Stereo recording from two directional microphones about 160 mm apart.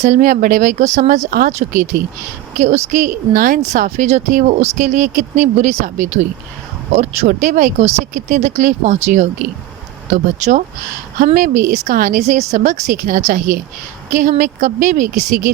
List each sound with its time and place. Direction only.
0.0 s a woman's voice: 50° right (ahead or behind)
1.3 s speech: 65° right (ahead or behind)
2.6 s a woman's voice: 45° right (ahead or behind)